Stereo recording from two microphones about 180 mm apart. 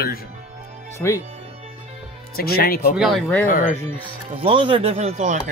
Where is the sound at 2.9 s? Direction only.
Centre (ahead or behind).